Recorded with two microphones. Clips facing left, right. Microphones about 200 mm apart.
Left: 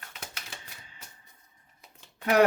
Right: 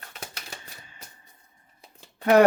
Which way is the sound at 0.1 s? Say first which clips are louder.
Right 4 dB; 35° right (ahead or behind).